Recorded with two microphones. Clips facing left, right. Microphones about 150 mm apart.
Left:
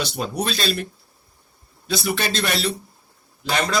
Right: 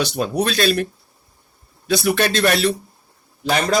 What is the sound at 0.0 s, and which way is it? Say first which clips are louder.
Speech: right 5 dB; 65° right (ahead or behind).